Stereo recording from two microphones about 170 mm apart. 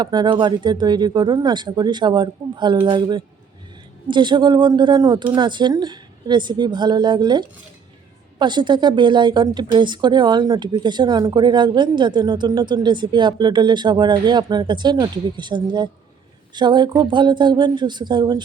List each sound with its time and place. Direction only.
0.0 s a woman's voice: 25° right (ahead or behind)